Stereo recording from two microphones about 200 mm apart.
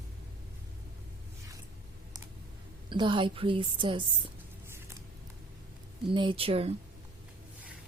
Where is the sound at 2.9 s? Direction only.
25° right (ahead or behind).